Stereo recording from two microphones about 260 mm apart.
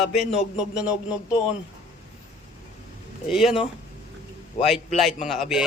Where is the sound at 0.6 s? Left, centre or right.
Centre.